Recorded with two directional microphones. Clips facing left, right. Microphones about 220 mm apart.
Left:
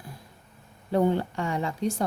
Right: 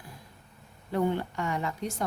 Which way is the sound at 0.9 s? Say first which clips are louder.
Left 4 dB; 30° left (ahead or behind).